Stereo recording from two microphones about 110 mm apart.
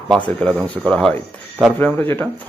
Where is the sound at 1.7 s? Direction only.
20° left (ahead or behind).